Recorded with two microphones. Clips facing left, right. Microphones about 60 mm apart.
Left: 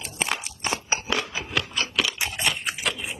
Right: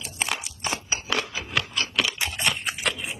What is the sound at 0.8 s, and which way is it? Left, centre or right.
Biting, left.